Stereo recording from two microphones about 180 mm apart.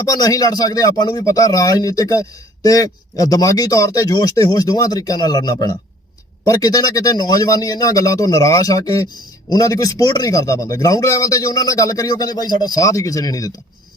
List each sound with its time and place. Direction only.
0.0 s a man's voice: 20° left (ahead or behind)